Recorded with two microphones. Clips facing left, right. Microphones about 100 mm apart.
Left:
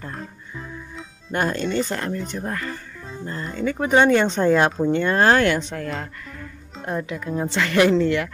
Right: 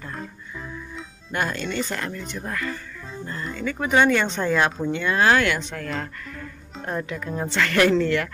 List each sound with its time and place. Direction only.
1.3 s speech: 35° left (ahead or behind)
6.9 s speech: 15° left (ahead or behind)